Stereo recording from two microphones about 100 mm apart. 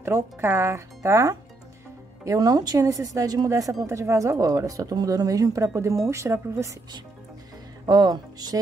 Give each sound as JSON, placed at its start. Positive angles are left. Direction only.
{"t": 0.0, "sound": "speech", "side_deg": -25}
{"t": 7.8, "sound": "speech", "side_deg": -45}